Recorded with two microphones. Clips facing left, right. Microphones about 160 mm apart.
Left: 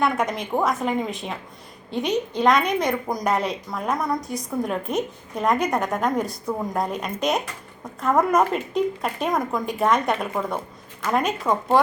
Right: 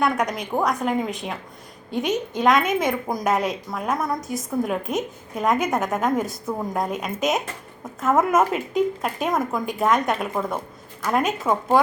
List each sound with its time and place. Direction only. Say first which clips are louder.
0.0 s speech: even; centre (ahead or behind)